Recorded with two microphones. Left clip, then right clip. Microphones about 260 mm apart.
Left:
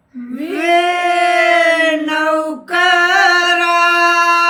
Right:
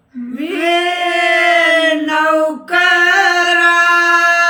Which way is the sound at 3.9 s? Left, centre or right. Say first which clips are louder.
Right 1 dB; right.